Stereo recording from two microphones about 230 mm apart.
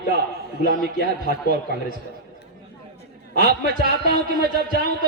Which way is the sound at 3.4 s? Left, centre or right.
Right.